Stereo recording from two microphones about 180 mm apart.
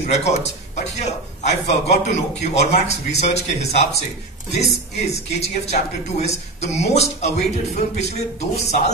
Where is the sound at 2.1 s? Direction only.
40° left (ahead or behind).